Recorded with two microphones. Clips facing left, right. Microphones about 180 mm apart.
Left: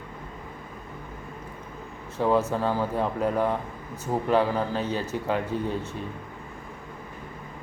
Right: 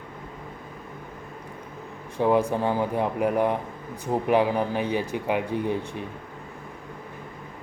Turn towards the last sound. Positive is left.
turn(degrees=-15)  # may be behind; listen again after turning